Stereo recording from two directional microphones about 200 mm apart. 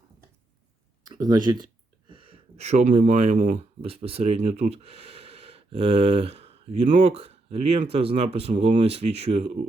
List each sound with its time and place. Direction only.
1.0 s speech: 20° right (ahead or behind)